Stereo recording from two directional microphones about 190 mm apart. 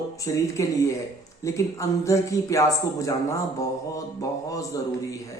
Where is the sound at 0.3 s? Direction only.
15° left (ahead or behind).